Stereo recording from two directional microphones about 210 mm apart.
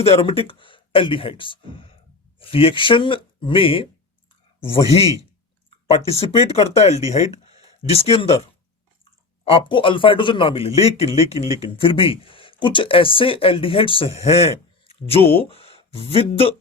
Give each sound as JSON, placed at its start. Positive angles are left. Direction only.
{"t": 0.0, "sound": "speech", "side_deg": 25}
{"t": 9.4, "sound": "speech", "side_deg": 25}